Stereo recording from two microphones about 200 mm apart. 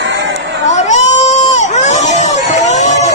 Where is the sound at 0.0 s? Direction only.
65° right (ahead or behind).